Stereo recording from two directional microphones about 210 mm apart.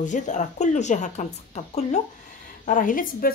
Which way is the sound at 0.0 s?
35° left (ahead or behind).